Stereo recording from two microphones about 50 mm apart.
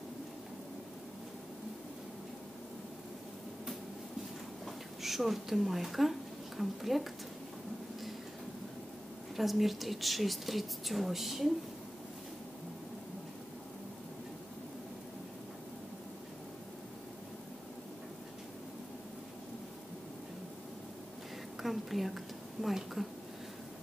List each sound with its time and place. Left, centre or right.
4.6 s speech: centre
9.4 s speech: centre
21.5 s a sound: centre